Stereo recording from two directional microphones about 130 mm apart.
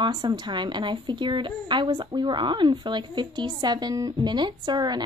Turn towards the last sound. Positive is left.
turn(degrees=-35)  # may be behind; listen again after turning